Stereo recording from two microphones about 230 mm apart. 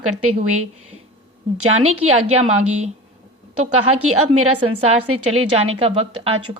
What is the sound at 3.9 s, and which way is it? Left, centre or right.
Speech, right.